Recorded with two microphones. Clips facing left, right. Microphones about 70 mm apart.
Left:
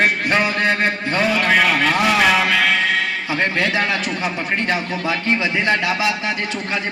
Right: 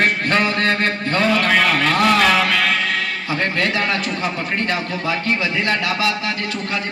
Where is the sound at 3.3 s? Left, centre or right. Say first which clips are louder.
Even; centre.